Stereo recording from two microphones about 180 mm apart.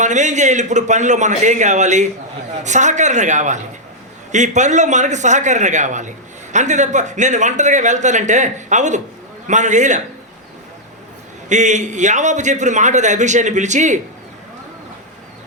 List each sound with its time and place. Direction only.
0.0 s a man's voice: 40° right (ahead or behind)
11.4 s a man's voice: 40° right (ahead or behind)